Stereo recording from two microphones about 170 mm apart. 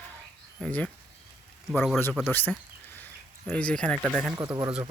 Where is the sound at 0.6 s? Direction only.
10° left (ahead or behind).